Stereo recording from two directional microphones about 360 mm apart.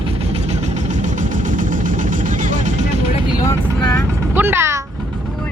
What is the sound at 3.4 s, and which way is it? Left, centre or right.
Vehicle, centre.